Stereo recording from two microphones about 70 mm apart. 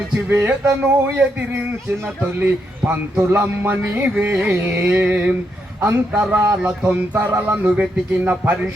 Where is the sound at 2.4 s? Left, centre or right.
Right.